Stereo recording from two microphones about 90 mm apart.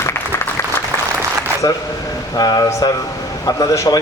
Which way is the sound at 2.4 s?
45° left (ahead or behind).